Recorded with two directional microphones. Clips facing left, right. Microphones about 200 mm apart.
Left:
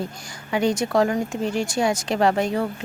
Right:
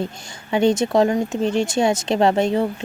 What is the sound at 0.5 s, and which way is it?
Speech, 25° right (ahead or behind).